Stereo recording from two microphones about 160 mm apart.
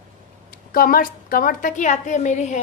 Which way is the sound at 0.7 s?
65° left (ahead or behind).